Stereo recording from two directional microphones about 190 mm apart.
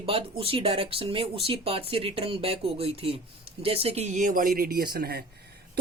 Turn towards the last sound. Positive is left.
turn(degrees=-55)  # may be behind; listen again after turning